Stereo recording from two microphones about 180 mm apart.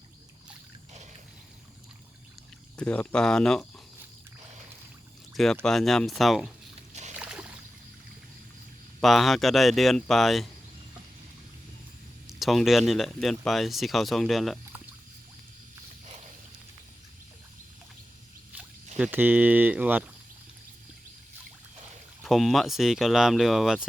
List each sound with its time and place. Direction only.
2.7 s speech: 5° left (ahead or behind)
5.3 s speech: centre (ahead or behind)
7.2 s a sound: 5° right (ahead or behind)
9.0 s speech: centre (ahead or behind)
12.3 s speech: centre (ahead or behind)
18.9 s speech: 10° right (ahead or behind)
22.2 s speech: centre (ahead or behind)